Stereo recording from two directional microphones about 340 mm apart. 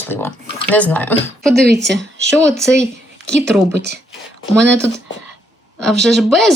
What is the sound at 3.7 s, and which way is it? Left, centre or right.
Speech, right.